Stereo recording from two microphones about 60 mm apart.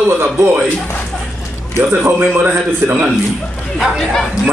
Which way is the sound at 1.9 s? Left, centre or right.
Right.